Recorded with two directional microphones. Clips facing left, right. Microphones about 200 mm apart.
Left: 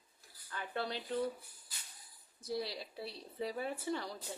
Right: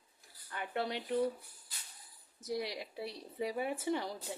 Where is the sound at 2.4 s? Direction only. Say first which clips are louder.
Right 1 dB; 15° right (ahead or behind).